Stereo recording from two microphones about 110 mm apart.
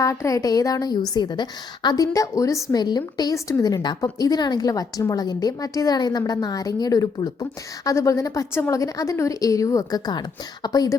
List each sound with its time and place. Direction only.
0.0 s a woman's voice: 30° left (ahead or behind)